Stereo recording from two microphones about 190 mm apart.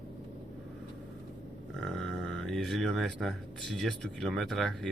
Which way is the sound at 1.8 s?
5° left (ahead or behind).